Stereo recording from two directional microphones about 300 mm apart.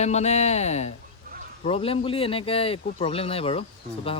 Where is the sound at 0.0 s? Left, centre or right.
Left.